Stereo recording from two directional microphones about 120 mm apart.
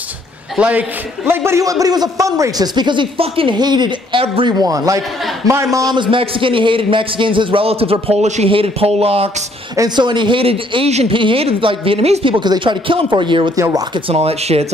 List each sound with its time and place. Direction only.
0.6 s a man's voice: 10° right (ahead or behind); by 4.6 s 45° right (ahead or behind)
4.6 s a man's voice: 30° right (ahead or behind)
5.9 s a man's voice: 45° right (ahead or behind)
9.8 s a man's voice: 35° right (ahead or behind)
13.6 s a man's voice: 25° right (ahead or behind)
13.9 s speech: 50° right (ahead or behind)